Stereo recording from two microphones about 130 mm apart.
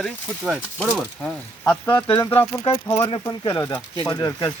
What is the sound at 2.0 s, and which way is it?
Speech, 35° left (ahead or behind).